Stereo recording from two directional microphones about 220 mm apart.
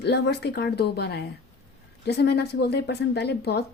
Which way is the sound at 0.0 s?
50° left (ahead or behind).